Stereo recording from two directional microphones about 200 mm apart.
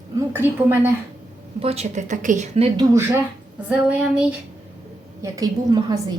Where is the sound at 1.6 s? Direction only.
30° right (ahead or behind).